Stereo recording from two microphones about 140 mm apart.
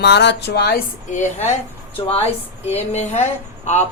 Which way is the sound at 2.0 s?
45° left (ahead or behind).